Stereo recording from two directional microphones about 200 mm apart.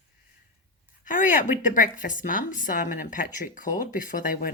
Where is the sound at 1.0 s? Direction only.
40° left (ahead or behind).